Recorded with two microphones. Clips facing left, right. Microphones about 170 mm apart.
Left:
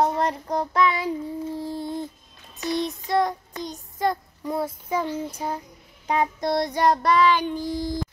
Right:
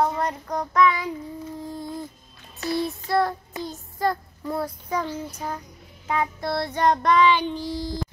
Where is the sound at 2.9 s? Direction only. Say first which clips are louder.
Even; 20° left (ahead or behind).